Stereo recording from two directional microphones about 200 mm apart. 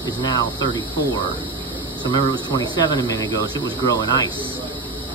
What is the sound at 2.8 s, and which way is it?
Speech, 20° left (ahead or behind).